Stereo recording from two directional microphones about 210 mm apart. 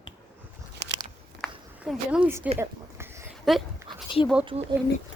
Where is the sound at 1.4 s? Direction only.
Centre (ahead or behind).